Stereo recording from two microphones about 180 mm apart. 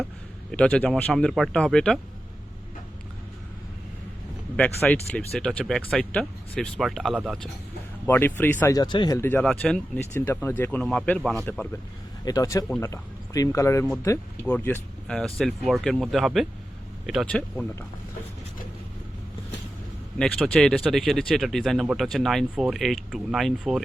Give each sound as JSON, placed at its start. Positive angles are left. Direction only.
{"t": 0.5, "sound": "speech", "side_deg": 5}
{"t": 4.5, "sound": "speech", "side_deg": 10}
{"t": 8.0, "sound": "speech", "side_deg": 10}
{"t": 8.7, "sound": "speech", "side_deg": 25}
{"t": 12.2, "sound": "speech", "side_deg": 20}
{"t": 20.1, "sound": "speech", "side_deg": 5}